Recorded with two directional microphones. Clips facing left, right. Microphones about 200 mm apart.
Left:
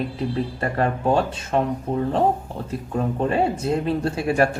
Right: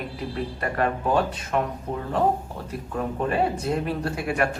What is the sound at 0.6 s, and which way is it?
Speech, 30° left (ahead or behind).